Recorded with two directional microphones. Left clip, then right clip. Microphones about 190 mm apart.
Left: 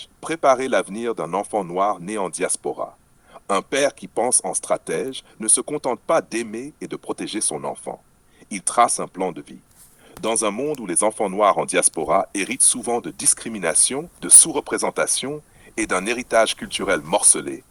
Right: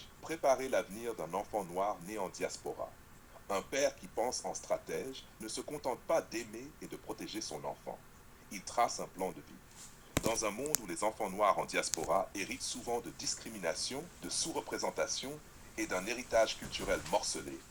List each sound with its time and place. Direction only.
0.0 s speech: 45° left (ahead or behind)